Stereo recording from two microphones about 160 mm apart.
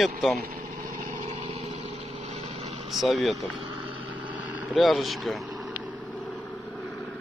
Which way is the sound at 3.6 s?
35° right (ahead or behind).